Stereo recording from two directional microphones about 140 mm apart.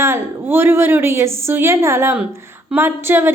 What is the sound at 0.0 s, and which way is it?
A woman's voice, 15° right (ahead or behind).